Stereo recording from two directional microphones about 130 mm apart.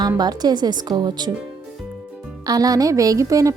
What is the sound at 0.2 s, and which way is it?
A woman's voice, 30° right (ahead or behind).